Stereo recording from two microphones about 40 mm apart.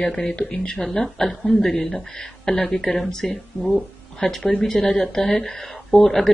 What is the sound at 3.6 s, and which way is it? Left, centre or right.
Speech, centre.